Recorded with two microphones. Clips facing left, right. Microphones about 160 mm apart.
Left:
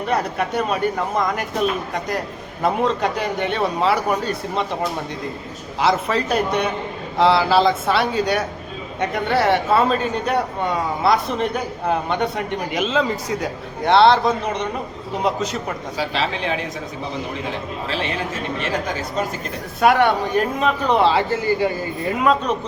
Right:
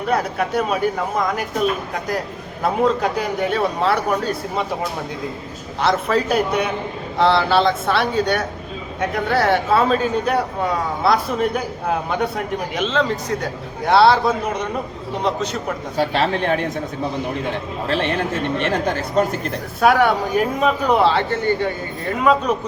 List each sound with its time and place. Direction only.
0.0 s speech: centre (ahead or behind)
2.6 s speech: 5° right (ahead or behind)
5.8 s speech: centre (ahead or behind)
16.0 s speech: 55° right (ahead or behind)
17.8 s speech: 55° right (ahead or behind)
19.1 s speech: 60° right (ahead or behind)
19.8 s speech: centre (ahead or behind)